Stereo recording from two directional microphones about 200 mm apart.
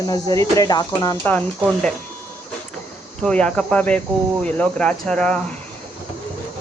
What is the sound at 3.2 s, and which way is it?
Speech, 5° left (ahead or behind).